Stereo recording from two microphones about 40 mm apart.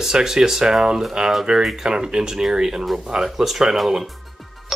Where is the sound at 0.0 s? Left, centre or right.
Centre.